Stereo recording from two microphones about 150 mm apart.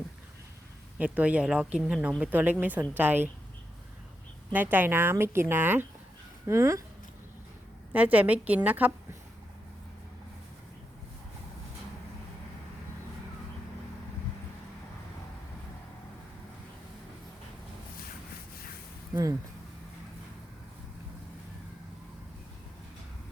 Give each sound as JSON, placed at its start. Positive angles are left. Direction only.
{"t": 0.9, "sound": "speech", "side_deg": -10}
{"t": 4.5, "sound": "speech", "side_deg": -10}
{"t": 7.9, "sound": "speech", "side_deg": -10}